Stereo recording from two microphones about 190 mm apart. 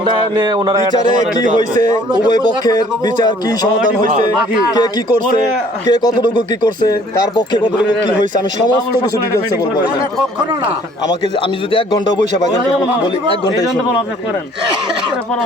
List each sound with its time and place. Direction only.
0.0 s a sound: 25° right (ahead or behind)
1.8 s a man's voice: 20° left (ahead or behind)
5.9 s a man's voice: 20° left (ahead or behind)
7.3 s a man's voice: 25° left (ahead or behind)
11.7 s a man's voice: 25° left (ahead or behind)